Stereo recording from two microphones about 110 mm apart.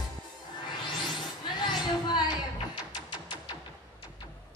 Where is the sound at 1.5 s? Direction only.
40° left (ahead or behind).